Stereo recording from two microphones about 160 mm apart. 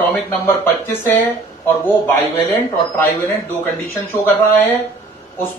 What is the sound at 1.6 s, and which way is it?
Speech, 15° left (ahead or behind).